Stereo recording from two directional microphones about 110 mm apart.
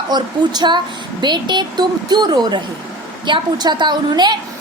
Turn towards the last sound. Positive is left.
turn(degrees=-40)  # may be behind; listen again after turning